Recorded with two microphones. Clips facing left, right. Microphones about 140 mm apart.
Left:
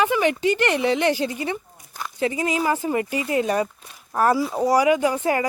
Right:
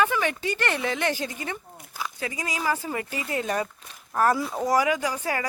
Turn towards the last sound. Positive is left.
turn(degrees=25)  # may be behind; listen again after turning